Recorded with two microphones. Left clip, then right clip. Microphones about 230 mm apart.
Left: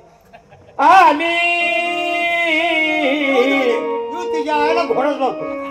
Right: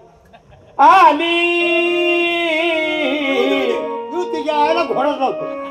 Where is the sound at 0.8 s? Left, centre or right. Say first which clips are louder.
Right 1 dB; right.